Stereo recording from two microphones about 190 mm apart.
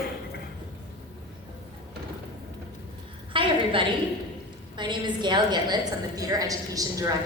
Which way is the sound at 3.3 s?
25° right (ahead or behind).